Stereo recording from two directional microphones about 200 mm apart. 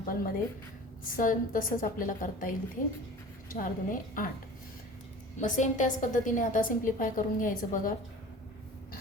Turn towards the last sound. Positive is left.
turn(degrees=40)  # may be behind; listen again after turning